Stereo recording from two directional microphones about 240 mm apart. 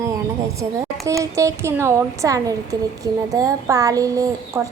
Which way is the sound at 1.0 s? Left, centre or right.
Centre.